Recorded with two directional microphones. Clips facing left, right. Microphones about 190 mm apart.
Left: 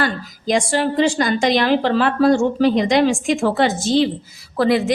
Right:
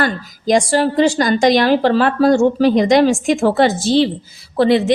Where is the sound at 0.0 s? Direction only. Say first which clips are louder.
Right 3 dB; 40° right (ahead or behind).